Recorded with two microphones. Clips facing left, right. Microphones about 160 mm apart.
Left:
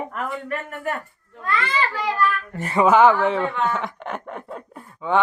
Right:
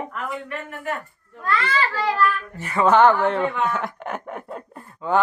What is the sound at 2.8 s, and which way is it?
Speech, 5° left (ahead or behind).